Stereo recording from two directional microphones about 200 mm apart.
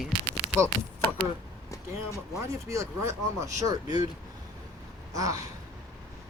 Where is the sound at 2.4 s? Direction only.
15° right (ahead or behind).